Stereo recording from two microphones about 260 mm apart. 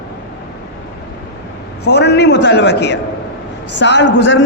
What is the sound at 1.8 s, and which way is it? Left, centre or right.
A man's voice, left.